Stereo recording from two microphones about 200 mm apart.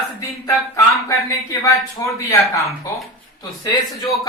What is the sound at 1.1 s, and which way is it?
A man's voice, 15° left (ahead or behind).